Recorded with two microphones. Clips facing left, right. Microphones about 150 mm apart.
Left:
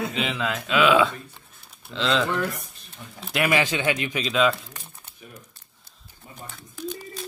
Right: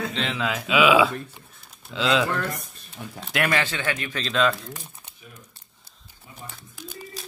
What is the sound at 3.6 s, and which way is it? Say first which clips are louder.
Speech: left 3 dB; 15° left (ahead or behind).